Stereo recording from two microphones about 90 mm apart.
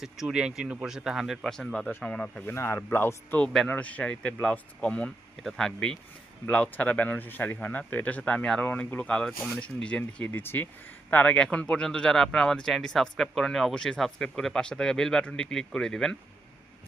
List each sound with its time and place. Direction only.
0.0 s speech: 5° right (ahead or behind)
1.5 s speech: 5° left (ahead or behind)
2.5 s speech: 30° left (ahead or behind)
3.4 s speech: 5° left (ahead or behind)
3.7 s speech: 15° left (ahead or behind)